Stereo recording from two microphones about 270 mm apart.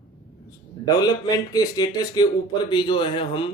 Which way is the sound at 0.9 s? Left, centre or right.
Centre.